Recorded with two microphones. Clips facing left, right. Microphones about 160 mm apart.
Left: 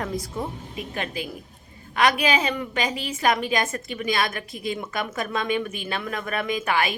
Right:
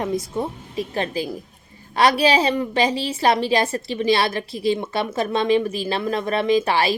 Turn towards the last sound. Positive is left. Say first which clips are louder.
# right 6 dB
turn(degrees=-30)  # may be behind; listen again after turning